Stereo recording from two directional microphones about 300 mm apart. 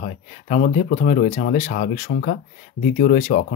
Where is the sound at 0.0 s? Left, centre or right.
Left.